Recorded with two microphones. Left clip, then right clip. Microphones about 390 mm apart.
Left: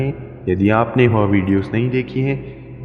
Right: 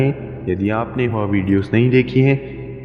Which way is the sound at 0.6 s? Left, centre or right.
Left.